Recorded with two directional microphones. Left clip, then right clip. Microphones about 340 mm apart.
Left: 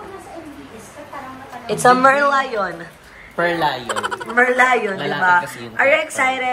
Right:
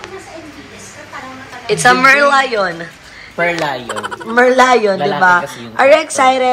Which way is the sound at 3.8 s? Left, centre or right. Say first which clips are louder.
Right 1 dB; centre.